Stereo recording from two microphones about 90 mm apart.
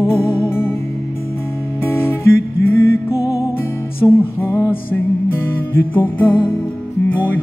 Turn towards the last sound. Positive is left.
turn(degrees=20)  # may be behind; listen again after turning